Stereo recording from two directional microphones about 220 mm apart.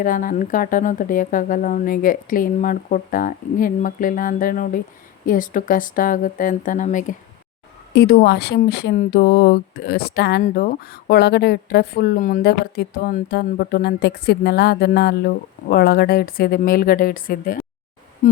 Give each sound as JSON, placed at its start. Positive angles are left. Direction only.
{"t": 0.0, "sound": "speech", "side_deg": 40}
{"t": 7.9, "sound": "speech", "side_deg": 45}